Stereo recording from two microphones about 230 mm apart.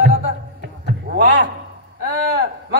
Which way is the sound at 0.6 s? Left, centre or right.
Right.